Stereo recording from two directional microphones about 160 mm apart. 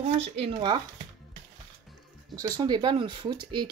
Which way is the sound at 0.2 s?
35° right (ahead or behind).